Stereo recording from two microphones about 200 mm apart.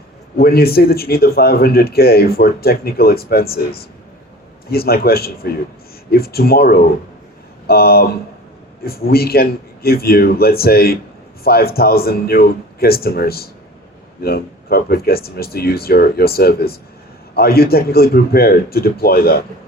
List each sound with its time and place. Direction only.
0.3 s a man's voice: 50° left (ahead or behind)